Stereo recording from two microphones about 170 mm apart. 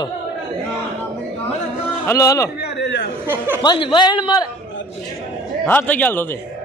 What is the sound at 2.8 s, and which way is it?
Chatter, 90° left.